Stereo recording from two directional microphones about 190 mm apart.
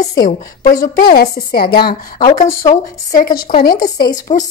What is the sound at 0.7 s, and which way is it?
A woman's voice, 50° left (ahead or behind).